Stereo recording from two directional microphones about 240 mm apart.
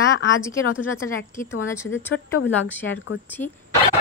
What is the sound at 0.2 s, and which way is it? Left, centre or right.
Speech, left.